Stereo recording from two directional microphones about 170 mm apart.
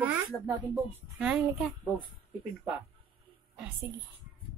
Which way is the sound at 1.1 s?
5° right (ahead or behind).